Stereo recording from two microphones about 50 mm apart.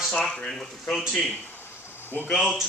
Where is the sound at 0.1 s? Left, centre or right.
Centre.